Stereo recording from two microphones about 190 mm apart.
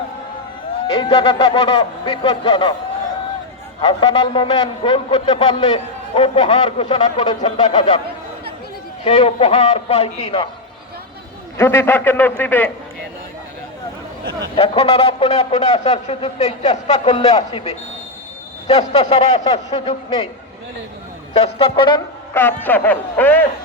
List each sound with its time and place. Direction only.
0.9 s a man's voice: 25° left (ahead or behind)
3.8 s a man's voice: 25° left (ahead or behind)
9.0 s speech: 30° left (ahead or behind)
11.5 s speech: 15° left (ahead or behind)
14.5 s speech: 30° left (ahead or behind)
17.2 s a man's voice: 25° left (ahead or behind)
18.7 s speech: 35° left (ahead or behind)
21.3 s a man's voice: 30° left (ahead or behind)
22.6 s speech: 10° left (ahead or behind)